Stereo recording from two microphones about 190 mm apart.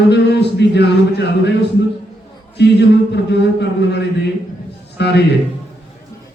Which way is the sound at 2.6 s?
65° left (ahead or behind).